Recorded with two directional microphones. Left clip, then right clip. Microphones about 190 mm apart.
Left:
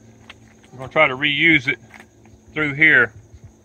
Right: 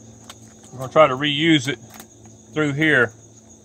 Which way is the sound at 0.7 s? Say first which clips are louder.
Right 2 dB; 30° right (ahead or behind).